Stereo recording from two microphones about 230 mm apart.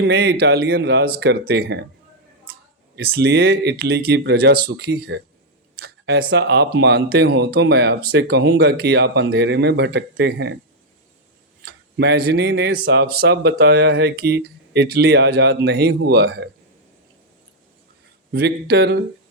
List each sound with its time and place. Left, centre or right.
0.0 s speech: right
2.9 s speech: right
5.8 s a sound: right
6.3 s speech: right
11.6 s speech: right
18.3 s speech: right